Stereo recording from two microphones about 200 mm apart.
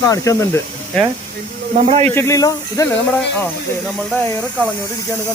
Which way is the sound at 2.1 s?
15° left (ahead or behind).